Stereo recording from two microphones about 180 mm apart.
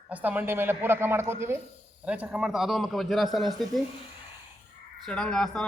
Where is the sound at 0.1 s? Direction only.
10° right (ahead or behind).